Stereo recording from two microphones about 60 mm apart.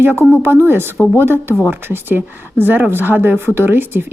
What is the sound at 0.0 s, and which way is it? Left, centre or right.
Speech, right.